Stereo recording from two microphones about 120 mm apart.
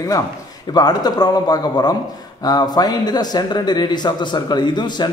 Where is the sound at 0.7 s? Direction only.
35° left (ahead or behind).